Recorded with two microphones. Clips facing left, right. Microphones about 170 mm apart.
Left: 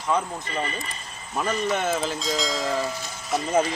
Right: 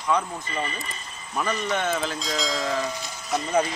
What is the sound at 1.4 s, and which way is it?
Speech, 5° left (ahead or behind).